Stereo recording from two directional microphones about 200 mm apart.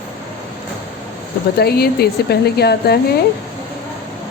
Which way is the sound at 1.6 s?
50° left (ahead or behind).